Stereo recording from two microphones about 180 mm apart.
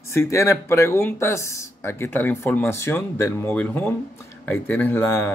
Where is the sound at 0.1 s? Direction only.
15° left (ahead or behind).